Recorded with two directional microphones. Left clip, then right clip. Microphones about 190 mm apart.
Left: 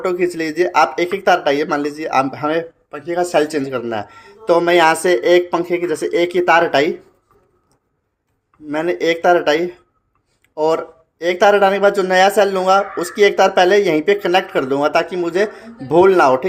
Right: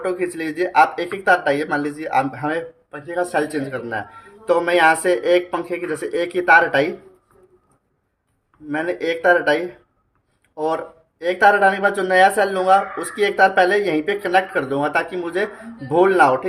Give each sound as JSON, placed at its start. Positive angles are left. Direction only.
{"t": 0.0, "sound": "speech", "side_deg": 40}
{"t": 8.6, "sound": "speech", "side_deg": 40}